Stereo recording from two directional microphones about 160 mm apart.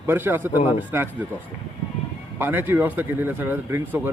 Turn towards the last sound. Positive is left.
turn(degrees=-15)  # may be behind; listen again after turning